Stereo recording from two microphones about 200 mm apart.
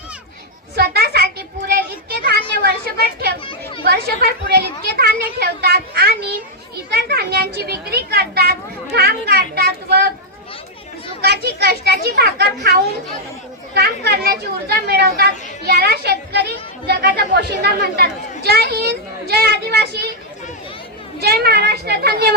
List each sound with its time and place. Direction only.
0.8 s a sound: 50° right (ahead or behind)
9.0 s chatter: 50° right (ahead or behind)
11.2 s children playing: 55° right (ahead or behind)
13.7 s speech: 55° right (ahead or behind)
21.2 s a woman's voice: 50° right (ahead or behind)